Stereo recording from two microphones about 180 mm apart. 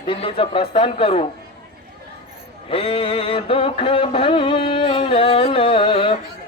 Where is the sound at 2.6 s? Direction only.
30° left (ahead or behind).